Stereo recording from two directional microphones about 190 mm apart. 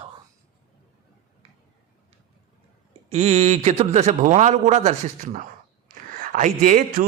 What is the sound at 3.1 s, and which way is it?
A man's voice, 35° right (ahead or behind).